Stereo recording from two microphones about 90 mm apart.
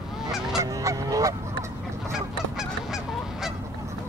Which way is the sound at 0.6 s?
40° right (ahead or behind).